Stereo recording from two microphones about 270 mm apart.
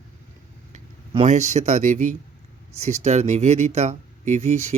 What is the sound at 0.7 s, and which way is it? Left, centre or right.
Speech, right.